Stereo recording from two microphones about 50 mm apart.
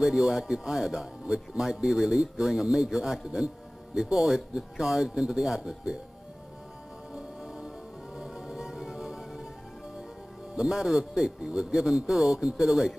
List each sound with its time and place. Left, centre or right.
0.0 s speech: centre
7.2 s music: centre
10.5 s speech: centre